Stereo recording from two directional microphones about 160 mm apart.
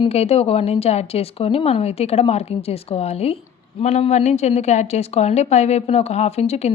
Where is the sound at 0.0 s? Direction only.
40° left (ahead or behind).